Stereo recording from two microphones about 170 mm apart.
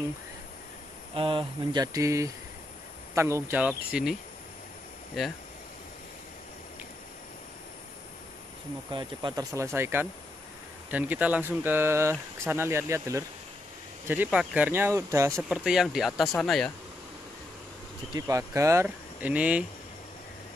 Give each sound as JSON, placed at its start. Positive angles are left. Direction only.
{"t": 1.1, "sound": "speech", "side_deg": -30}
{"t": 8.9, "sound": "speech", "side_deg": -25}
{"t": 15.4, "sound": "speech", "side_deg": -5}
{"t": 18.1, "sound": "speech", "side_deg": -20}